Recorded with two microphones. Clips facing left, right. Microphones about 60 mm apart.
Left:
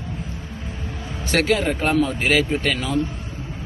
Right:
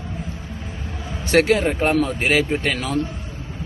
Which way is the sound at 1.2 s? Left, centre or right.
Right.